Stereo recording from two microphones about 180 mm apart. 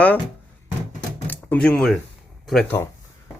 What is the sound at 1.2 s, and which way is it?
Speech, 5° left (ahead or behind).